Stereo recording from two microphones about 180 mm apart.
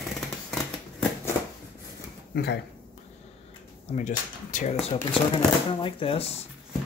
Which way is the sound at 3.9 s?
45° left (ahead or behind).